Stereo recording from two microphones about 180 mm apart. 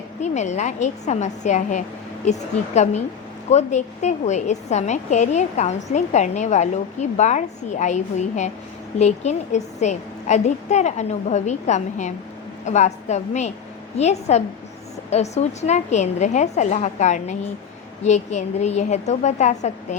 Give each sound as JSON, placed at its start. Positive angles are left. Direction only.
{"t": 0.2, "sound": "a woman's voice", "side_deg": 40}